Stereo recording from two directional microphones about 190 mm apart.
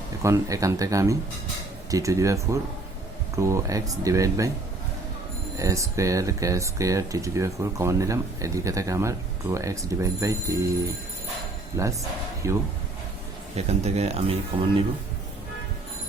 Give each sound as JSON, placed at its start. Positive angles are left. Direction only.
{"t": 0.2, "sound": "speech", "side_deg": -15}
{"t": 5.5, "sound": "speech", "side_deg": -15}
{"t": 13.6, "sound": "speech", "side_deg": -35}